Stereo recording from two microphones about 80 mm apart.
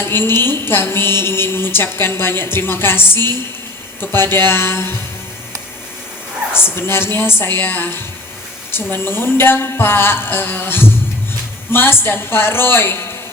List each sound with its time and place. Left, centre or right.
0.0 s a woman's voice: left
6.7 s a woman's voice: left